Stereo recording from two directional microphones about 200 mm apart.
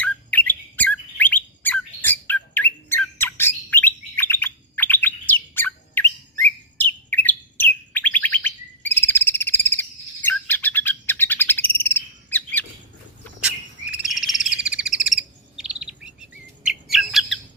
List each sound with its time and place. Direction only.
0.0 s bird: 10° left (ahead or behind)
14.2 s a sound: centre (ahead or behind)
14.5 s chirp: 5° right (ahead or behind)